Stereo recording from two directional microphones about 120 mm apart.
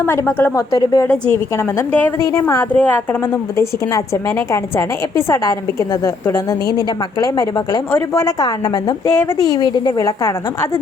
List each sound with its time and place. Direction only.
0.0 s a woman's voice: 20° left (ahead or behind)
0.7 s a woman's voice: 30° left (ahead or behind)
1.3 s a woman's voice: 15° left (ahead or behind); by 9.0 s 35° left (ahead or behind)
9.0 s a woman's voice: 20° left (ahead or behind)
9.5 s a woman's voice: 35° left (ahead or behind)